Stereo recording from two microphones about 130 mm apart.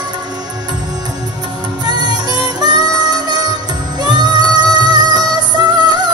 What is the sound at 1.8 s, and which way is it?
Music, 35° right (ahead or behind).